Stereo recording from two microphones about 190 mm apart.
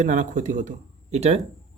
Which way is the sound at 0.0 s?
40° right (ahead or behind).